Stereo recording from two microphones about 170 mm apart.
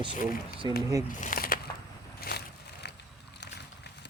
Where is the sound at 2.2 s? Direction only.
75° left (ahead or behind).